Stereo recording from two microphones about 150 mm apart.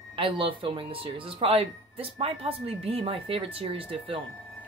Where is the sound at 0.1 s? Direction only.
35° right (ahead or behind).